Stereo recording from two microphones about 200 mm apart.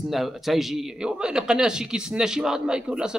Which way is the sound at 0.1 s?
Centre (ahead or behind).